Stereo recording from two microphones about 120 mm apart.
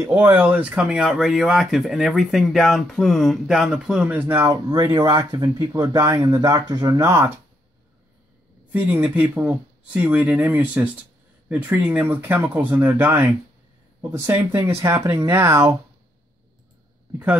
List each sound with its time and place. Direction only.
0.0 s speech: 20° right (ahead or behind)
4.5 s speech: 30° right (ahead or behind)
8.7 s speech: 15° right (ahead or behind)